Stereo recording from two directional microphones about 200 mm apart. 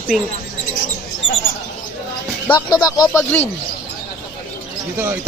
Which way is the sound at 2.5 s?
20° left (ahead or behind).